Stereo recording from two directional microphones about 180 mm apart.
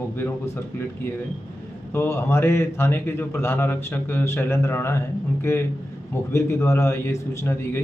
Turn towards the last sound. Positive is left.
turn(degrees=10)  # may be behind; listen again after turning